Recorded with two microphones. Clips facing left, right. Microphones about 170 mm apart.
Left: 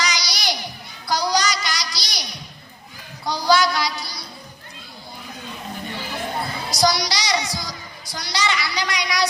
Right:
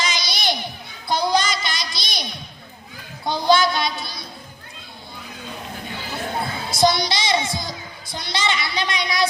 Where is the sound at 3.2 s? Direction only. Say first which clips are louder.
Right 1 dB; 25° right (ahead or behind).